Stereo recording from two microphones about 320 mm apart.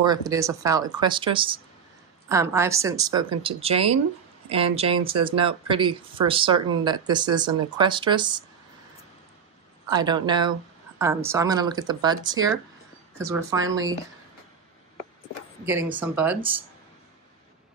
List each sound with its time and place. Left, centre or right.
0.0 s speech: centre
9.8 s speech: centre
16.0 s speech: centre